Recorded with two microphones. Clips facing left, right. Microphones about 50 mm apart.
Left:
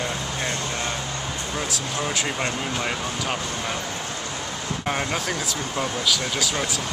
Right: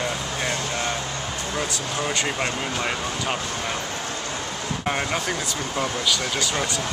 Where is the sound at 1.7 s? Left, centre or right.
Centre.